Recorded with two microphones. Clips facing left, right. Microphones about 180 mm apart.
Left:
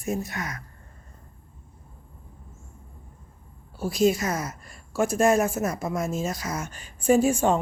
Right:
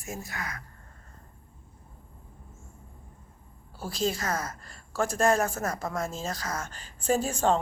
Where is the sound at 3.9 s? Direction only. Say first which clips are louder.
Left 7 dB; 15° left (ahead or behind).